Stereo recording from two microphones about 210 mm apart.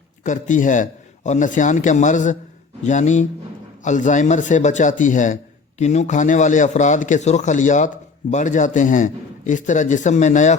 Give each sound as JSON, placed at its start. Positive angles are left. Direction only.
{"t": 0.3, "sound": "a man's voice", "side_deg": 40}